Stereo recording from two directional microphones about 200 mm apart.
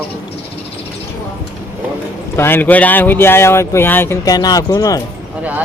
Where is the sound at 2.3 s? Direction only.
10° left (ahead or behind).